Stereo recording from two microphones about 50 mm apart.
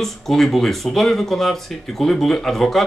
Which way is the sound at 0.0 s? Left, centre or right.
Centre.